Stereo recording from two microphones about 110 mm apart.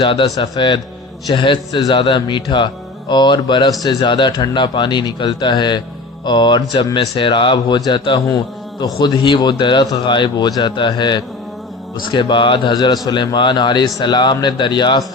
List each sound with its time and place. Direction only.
0.0 s a man's voice: 50° left (ahead or behind)